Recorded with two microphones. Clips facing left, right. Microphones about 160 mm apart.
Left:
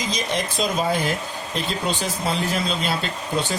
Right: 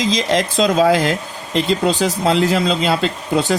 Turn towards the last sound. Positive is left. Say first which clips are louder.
# right 7 dB
turn(degrees=-90)